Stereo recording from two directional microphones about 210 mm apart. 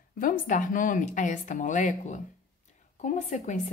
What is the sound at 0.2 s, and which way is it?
A woman's voice, 40° left (ahead or behind).